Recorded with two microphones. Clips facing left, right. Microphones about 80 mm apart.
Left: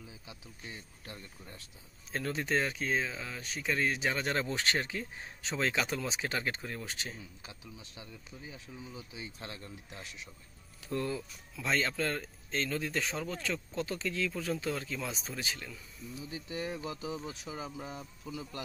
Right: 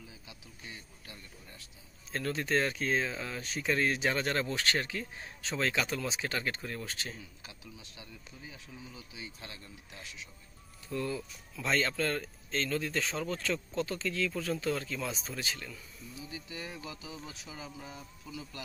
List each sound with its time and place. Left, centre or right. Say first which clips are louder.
1.0 s speech: left 3 dB; left
2.1 s speech: right 1 dB; centre
4.3 s speech: even; left
11.2 s speech: right 1 dB; centre
16.3 s speech: left 6 dB; left